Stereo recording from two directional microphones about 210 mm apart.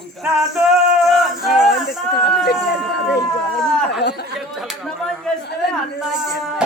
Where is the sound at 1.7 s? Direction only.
50° left (ahead or behind).